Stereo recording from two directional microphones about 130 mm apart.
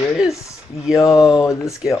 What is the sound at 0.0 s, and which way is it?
Speech, 20° left (ahead or behind).